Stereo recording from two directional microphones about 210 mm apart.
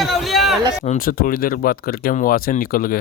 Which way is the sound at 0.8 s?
35° left (ahead or behind).